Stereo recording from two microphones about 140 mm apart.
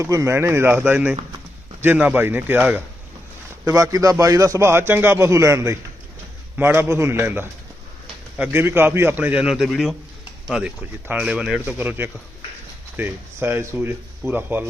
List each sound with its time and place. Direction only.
0.0 s a man's voice: 20° right (ahead or behind)